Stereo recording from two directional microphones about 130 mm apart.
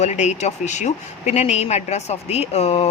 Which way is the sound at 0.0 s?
60° left (ahead or behind).